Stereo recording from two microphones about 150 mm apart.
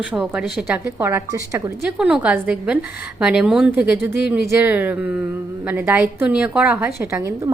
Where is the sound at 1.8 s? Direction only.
5° right (ahead or behind).